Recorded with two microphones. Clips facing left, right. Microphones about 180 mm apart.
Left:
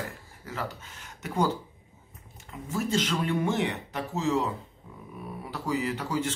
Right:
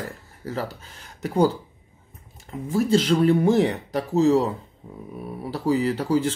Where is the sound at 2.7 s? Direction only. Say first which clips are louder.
Right 8 dB; 35° right (ahead or behind).